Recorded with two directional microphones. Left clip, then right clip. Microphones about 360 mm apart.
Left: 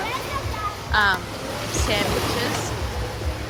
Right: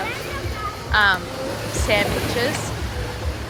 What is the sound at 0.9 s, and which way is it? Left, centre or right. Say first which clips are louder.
Speech: right 3 dB; centre.